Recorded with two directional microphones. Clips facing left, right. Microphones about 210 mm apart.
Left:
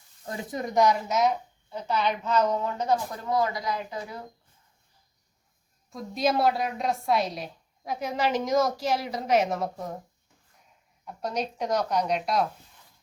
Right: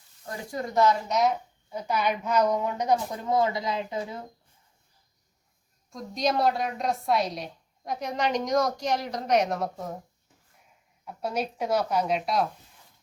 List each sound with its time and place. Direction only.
0.3 s speech: 20° left (ahead or behind)
1.0 s a woman's voice: centre (ahead or behind)
1.7 s speech: 10° right (ahead or behind)
5.9 s a woman's voice: 5° left (ahead or behind)
11.0 s a woman's voice: 5° right (ahead or behind)